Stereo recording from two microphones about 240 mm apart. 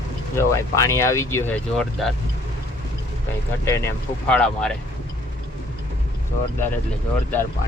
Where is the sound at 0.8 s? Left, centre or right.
Centre.